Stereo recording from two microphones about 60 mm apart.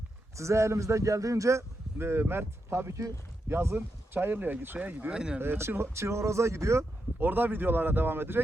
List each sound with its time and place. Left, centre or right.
0.3 s a man's voice: right
5.1 s speech: centre
5.4 s speech: right
7.2 s speech: right